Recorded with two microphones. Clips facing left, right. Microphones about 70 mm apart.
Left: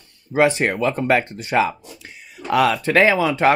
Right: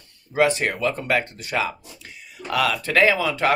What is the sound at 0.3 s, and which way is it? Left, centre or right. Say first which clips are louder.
Speech: left 3 dB; left.